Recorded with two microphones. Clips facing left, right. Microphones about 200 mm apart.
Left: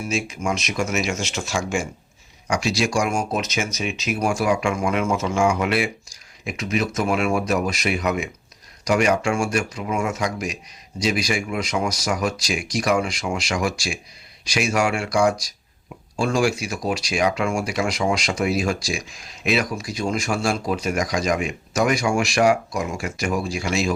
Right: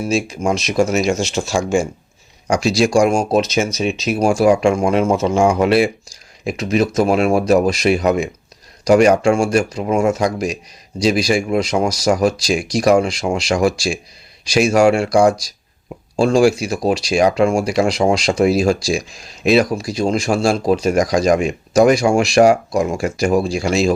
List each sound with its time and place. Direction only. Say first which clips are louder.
0.0 s speech: right 7 dB; 35° right (ahead or behind)